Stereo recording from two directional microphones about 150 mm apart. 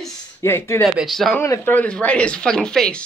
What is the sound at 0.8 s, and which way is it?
Speech, centre (ahead or behind).